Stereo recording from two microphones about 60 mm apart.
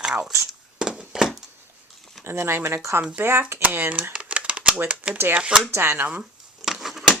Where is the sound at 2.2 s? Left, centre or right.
Right.